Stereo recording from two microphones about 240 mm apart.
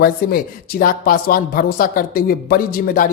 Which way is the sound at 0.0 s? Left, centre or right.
Left.